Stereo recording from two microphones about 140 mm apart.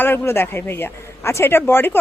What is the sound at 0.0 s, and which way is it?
Speech, 15° left (ahead or behind).